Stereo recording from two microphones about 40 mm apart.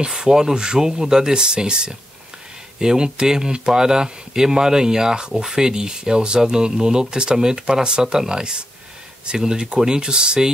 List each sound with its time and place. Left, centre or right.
0.0 s speech: right